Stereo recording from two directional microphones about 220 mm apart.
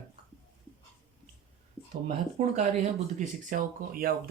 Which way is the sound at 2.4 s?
30° right (ahead or behind).